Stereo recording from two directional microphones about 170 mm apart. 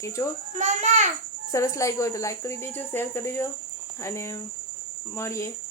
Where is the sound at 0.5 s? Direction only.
45° right (ahead or behind).